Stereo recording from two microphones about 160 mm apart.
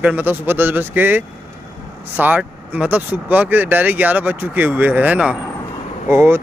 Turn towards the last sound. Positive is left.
turn(degrees=-15)  # may be behind; listen again after turning